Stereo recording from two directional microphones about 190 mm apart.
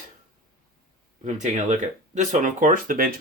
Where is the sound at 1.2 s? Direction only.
40° right (ahead or behind).